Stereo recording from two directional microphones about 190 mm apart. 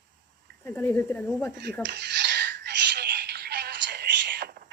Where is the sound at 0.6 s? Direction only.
15° left (ahead or behind).